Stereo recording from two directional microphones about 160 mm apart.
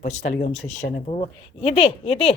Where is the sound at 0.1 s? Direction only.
45° left (ahead or behind).